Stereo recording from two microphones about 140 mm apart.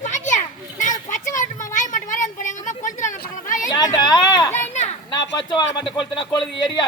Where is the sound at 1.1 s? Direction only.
65° left (ahead or behind).